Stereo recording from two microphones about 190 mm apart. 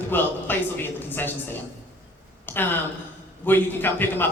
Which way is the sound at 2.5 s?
10° left (ahead or behind).